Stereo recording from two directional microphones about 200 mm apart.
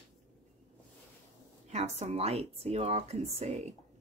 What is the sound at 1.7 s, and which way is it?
A woman's voice, 35° right (ahead or behind).